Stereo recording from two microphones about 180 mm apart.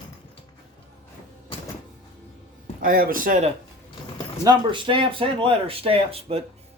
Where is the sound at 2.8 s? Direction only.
50° right (ahead or behind).